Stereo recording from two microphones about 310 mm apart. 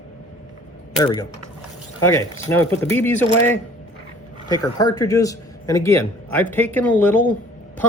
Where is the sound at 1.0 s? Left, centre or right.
Centre.